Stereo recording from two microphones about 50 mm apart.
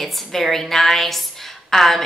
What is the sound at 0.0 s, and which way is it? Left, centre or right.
A woman's voice, centre.